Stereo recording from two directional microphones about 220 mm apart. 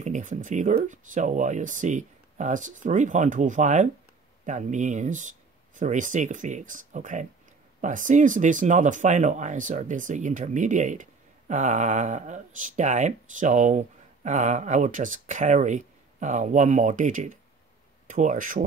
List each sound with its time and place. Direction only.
0.0 s speech: 35° right (ahead or behind)